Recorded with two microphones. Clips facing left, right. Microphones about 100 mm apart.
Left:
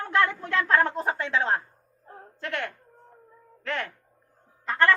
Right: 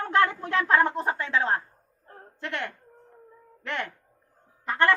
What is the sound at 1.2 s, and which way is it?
Speech, 5° right (ahead or behind).